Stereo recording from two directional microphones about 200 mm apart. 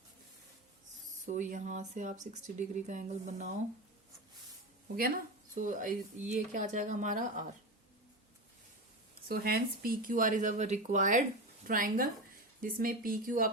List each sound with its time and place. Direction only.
1.2 s speech: 35° right (ahead or behind)
4.9 s speech: 45° right (ahead or behind)
9.3 s speech: 50° right (ahead or behind)